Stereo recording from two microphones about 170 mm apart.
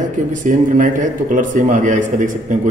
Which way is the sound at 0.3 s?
50° right (ahead or behind).